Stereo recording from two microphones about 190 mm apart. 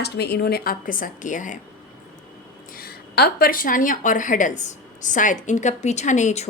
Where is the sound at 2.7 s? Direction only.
55° left (ahead or behind).